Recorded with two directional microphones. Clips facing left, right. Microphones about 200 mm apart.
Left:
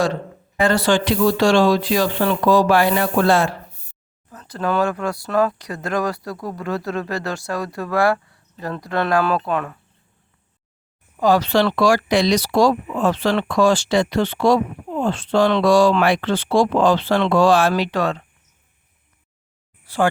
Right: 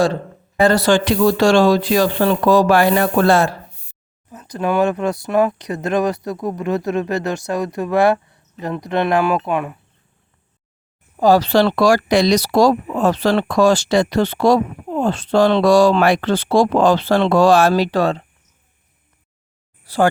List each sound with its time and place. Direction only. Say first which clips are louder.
0.6 s speech: right 3 dB; 40° right (ahead or behind)
4.3 s speech: right 2 dB; 15° right (ahead or behind)
11.2 s speech: right 3 dB; 35° right (ahead or behind)
19.8 s a sound: right 3 dB; 35° right (ahead or behind)